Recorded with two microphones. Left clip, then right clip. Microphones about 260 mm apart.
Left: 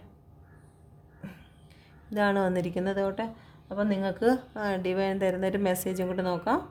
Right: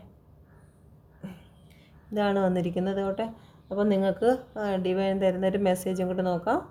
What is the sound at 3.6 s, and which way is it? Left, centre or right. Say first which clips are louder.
A woman's voice: right 4 dB; left.